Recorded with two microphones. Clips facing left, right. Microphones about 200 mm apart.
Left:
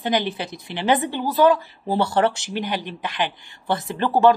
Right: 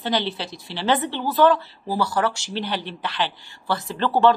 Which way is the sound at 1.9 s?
25° left (ahead or behind).